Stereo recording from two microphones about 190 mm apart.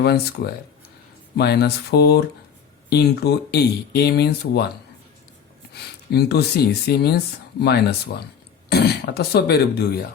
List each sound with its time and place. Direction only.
0.0 s speech: 60° left (ahead or behind)
5.7 s speech: 60° left (ahead or behind)